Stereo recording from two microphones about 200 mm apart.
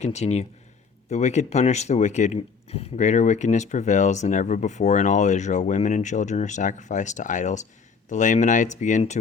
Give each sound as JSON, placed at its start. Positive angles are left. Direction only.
{"t": 0.0, "sound": "speech", "side_deg": 35}